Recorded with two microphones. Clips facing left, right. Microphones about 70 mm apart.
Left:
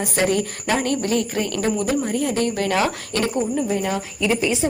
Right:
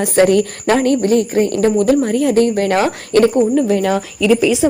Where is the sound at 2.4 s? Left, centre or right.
Right.